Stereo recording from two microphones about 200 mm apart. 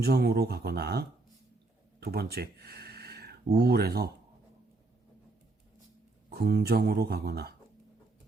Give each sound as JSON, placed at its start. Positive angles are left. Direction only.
{"t": 0.0, "sound": "speech", "side_deg": -50}
{"t": 6.3, "sound": "speech", "side_deg": -55}